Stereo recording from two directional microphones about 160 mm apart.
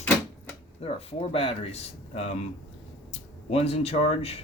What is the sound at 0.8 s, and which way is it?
Speech, 40° left (ahead or behind).